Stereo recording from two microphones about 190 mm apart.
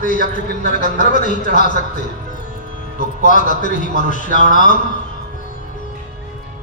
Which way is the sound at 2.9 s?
45° left (ahead or behind).